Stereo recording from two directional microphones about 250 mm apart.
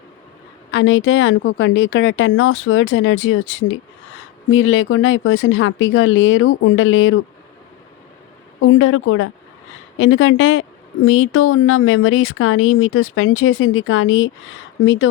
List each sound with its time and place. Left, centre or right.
0.7 s a woman's voice: left
8.6 s a woman's voice: left